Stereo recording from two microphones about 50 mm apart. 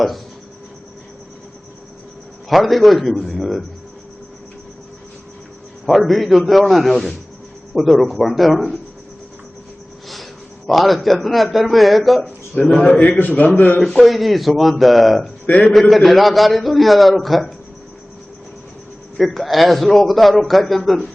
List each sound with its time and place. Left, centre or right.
2.5 s a man's voice: centre
5.8 s a man's voice: centre
10.7 s a man's voice: centre
12.8 s a man's voice: left
13.8 s a man's voice: centre
15.4 s a man's voice: left
15.7 s a man's voice: centre
19.1 s a man's voice: centre